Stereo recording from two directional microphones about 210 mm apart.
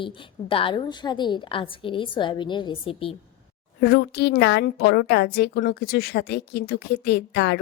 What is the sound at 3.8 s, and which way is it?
A woman's voice, 50° left (ahead or behind).